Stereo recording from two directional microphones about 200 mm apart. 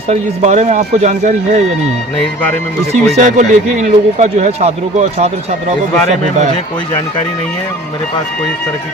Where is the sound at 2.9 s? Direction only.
35° right (ahead or behind).